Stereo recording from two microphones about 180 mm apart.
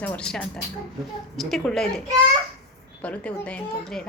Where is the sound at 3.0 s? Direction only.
5° left (ahead or behind).